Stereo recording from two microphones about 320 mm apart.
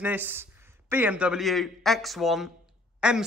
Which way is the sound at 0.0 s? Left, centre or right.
Centre.